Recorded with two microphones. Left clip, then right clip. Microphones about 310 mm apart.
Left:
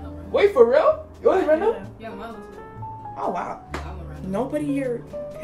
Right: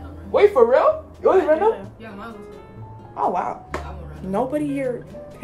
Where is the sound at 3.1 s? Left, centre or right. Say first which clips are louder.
Right 5 dB; centre.